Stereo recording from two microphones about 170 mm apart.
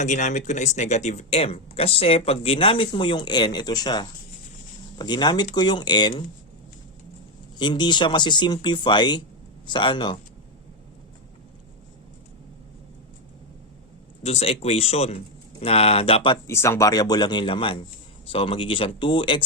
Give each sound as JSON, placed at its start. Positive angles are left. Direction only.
{"t": 0.0, "sound": "speech", "side_deg": 45}
{"t": 7.5, "sound": "speech", "side_deg": 25}
{"t": 14.3, "sound": "speech", "side_deg": 35}
{"t": 16.5, "sound": "speech", "side_deg": 15}